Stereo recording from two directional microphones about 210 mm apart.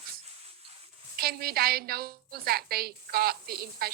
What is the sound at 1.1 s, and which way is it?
Speech, 45° right (ahead or behind).